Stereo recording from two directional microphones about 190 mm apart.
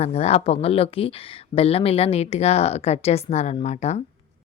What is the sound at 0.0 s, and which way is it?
Speech, 35° left (ahead or behind).